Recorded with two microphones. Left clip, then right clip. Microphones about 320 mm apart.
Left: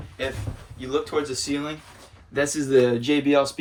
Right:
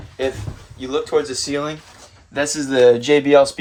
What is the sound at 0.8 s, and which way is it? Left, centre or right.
Speech, centre.